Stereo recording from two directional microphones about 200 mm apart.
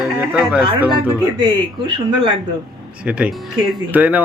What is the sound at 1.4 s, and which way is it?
Speech, 25° right (ahead or behind).